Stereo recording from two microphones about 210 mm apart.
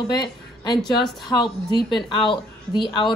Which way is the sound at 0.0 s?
20° left (ahead or behind).